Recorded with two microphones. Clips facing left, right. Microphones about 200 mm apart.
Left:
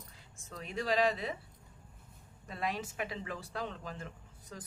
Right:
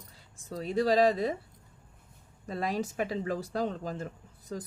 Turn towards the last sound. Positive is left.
turn(degrees=-35)  # may be behind; listen again after turning